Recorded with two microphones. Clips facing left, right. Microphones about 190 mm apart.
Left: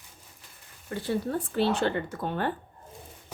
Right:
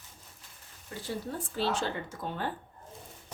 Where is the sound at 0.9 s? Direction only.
60° left (ahead or behind).